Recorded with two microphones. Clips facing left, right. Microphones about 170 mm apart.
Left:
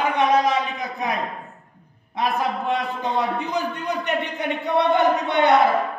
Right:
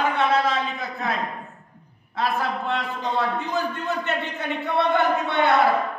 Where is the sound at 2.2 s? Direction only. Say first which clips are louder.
Left 2 dB; 15° left (ahead or behind).